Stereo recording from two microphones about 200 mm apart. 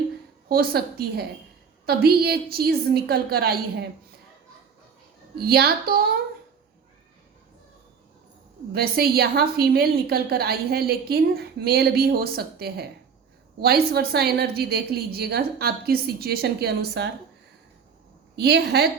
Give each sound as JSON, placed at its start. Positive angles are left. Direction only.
{"t": 0.4, "sound": "a woman's voice", "side_deg": -50}
{"t": 5.4, "sound": "a woman's voice", "side_deg": -50}
{"t": 8.7, "sound": "a woman's voice", "side_deg": -50}
{"t": 18.3, "sound": "a woman's voice", "side_deg": -55}